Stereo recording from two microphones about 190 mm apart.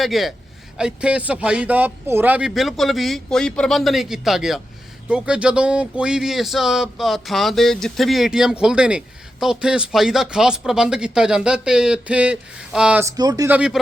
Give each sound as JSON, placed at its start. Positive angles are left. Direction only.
{"t": 0.0, "sound": "speech", "side_deg": 0}
{"t": 13.1, "sound": "speech", "side_deg": -20}
{"t": 13.5, "sound": "speech", "side_deg": -5}